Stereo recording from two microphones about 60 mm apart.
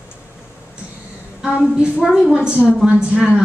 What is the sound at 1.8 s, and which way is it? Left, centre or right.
Speech, centre.